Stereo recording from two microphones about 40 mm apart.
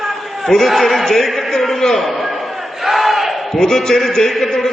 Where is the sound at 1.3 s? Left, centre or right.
Centre.